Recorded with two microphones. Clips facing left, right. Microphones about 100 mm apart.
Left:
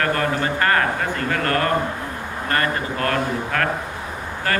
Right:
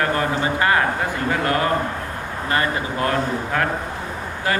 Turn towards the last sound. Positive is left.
turn(degrees=-15)  # may be behind; listen again after turning